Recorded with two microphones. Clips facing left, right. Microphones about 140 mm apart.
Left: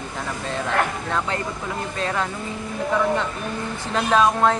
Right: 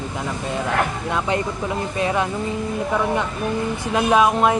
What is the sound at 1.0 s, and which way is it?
Speech, 15° right (ahead or behind).